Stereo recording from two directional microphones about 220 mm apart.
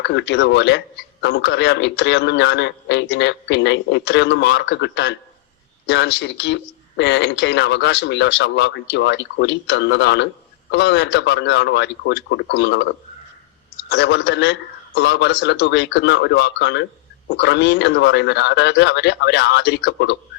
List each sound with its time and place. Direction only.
0.0 s speech: 50° left (ahead or behind)
13.9 s speech: 55° left (ahead or behind)